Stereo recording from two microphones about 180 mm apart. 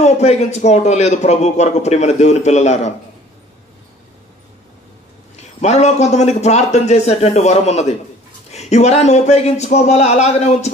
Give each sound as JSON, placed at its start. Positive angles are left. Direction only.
{"t": 0.0, "sound": "a man's voice", "side_deg": 40}
{"t": 5.3, "sound": "a man's voice", "side_deg": 40}